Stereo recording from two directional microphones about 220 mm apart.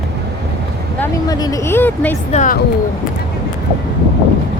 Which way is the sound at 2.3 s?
35° left (ahead or behind).